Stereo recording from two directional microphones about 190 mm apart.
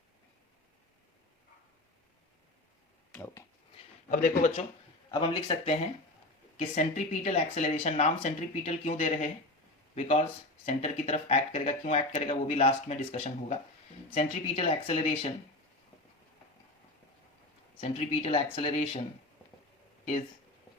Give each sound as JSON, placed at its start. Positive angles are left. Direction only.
{"t": 3.1, "sound": "a sound", "side_deg": 10}
{"t": 4.1, "sound": "speech", "side_deg": 45}
{"t": 5.1, "sound": "speech", "side_deg": 25}
{"t": 17.7, "sound": "speech", "side_deg": 30}